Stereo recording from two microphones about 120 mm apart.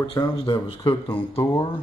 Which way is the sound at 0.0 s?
40° left (ahead or behind).